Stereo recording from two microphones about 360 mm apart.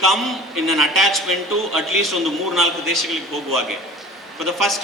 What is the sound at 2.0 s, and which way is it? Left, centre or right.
A man's voice, centre.